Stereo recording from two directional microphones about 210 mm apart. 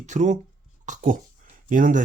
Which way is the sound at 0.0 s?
35° right (ahead or behind).